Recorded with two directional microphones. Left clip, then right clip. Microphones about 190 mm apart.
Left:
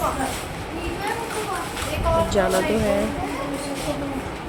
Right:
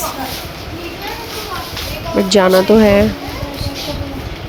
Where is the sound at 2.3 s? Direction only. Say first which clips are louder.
Right 13 dB; 50° right (ahead or behind).